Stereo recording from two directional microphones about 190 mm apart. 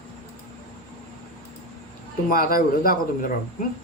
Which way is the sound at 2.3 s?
50° left (ahead or behind).